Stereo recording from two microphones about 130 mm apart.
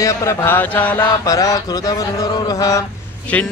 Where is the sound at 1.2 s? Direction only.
25° left (ahead or behind).